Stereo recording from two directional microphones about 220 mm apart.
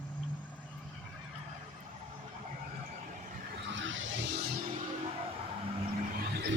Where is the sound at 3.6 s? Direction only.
55° right (ahead or behind).